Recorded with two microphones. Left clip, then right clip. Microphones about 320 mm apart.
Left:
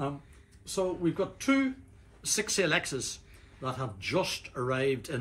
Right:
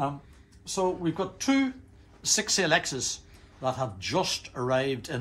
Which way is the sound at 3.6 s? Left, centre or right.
Centre.